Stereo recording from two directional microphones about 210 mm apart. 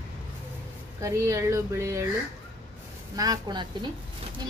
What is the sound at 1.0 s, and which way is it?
Speech, 15° right (ahead or behind).